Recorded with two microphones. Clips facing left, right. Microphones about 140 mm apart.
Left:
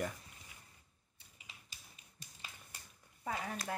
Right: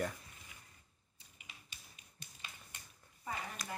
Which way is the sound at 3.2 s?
70° left (ahead or behind).